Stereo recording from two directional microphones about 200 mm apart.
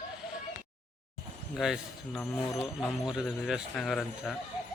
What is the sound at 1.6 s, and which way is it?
Speech, centre (ahead or behind).